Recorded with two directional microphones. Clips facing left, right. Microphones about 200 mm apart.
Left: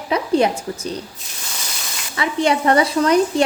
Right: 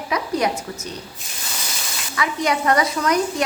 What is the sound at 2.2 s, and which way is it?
A woman's voice, 30° left (ahead or behind).